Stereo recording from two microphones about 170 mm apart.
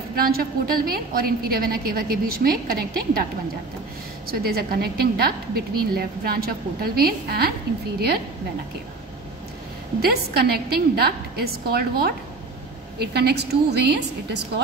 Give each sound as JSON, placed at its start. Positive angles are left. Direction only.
{"t": 0.1, "sound": "a woman's voice", "side_deg": -60}
{"t": 4.3, "sound": "a woman's voice", "side_deg": -65}
{"t": 9.9, "sound": "a woman's voice", "side_deg": -70}